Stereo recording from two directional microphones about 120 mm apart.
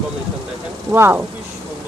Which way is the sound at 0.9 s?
20° right (ahead or behind).